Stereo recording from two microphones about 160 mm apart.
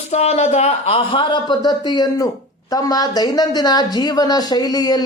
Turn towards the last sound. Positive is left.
turn(degrees=25)  # may be behind; listen again after turning